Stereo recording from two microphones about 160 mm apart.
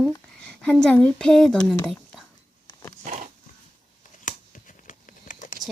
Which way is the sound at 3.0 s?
55° right (ahead or behind).